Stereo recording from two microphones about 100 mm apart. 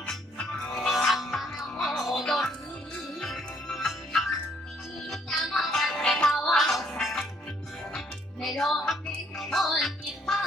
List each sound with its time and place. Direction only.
0.0 s music: 5° left (ahead or behind)